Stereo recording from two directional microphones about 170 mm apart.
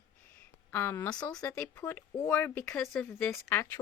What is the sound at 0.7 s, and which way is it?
Speech, 10° left (ahead or behind).